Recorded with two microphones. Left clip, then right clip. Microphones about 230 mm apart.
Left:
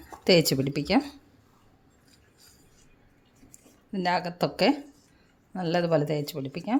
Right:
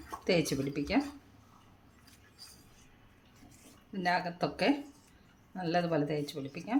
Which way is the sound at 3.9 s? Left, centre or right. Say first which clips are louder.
Left 4 dB; left.